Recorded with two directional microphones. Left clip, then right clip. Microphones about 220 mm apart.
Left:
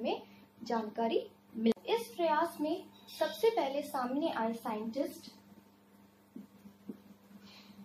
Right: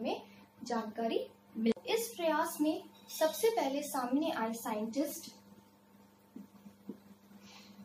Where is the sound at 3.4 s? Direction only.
15° left (ahead or behind).